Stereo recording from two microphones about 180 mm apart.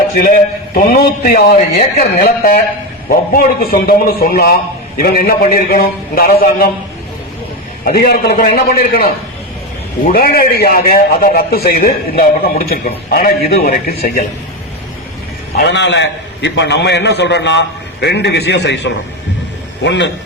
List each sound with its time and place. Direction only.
0.2 s a man's voice: 55° left (ahead or behind)
7.9 s a man's voice: 55° left (ahead or behind)
10.1 s a man's voice: 55° left (ahead or behind)
15.5 s a man's voice: 75° left (ahead or behind)